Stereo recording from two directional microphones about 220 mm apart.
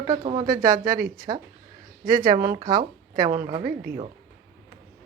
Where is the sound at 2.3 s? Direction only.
40° right (ahead or behind).